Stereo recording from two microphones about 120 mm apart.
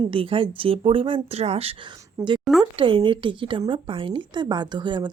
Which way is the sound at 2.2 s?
25° right (ahead or behind).